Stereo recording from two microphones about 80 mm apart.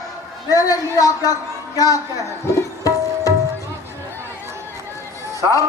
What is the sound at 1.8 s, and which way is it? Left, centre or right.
Tabla, left.